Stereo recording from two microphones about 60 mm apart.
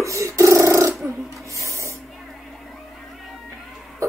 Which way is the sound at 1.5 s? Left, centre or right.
Right.